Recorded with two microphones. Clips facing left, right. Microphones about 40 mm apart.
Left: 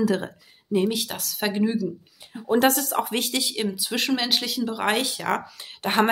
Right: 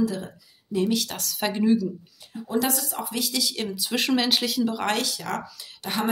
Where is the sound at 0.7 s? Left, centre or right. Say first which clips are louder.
Left 1 dB; centre.